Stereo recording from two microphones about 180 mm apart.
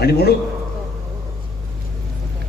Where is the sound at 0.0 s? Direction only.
60° left (ahead or behind).